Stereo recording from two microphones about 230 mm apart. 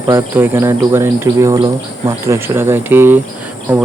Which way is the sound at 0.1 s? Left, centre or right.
Centre.